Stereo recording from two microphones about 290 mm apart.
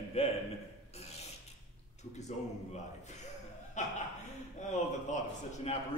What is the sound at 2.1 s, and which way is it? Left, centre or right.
A man's voice, left.